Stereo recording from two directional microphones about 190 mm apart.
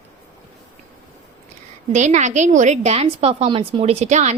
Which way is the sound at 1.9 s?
40° right (ahead or behind).